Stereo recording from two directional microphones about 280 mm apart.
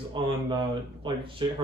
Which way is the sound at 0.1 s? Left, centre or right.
Centre.